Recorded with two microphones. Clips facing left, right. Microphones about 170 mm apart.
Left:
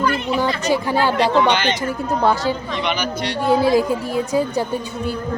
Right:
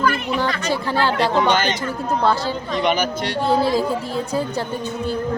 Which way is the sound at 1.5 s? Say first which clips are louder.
Even; 45° right (ahead or behind).